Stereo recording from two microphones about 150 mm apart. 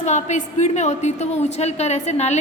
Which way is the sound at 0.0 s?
55° left (ahead or behind).